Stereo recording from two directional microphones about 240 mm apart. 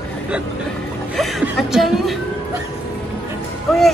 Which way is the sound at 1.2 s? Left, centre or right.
Centre.